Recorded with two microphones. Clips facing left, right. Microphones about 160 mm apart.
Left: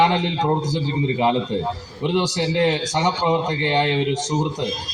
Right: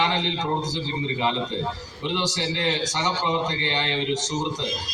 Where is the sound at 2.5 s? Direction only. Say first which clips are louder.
Left 9 dB; 55° left (ahead or behind).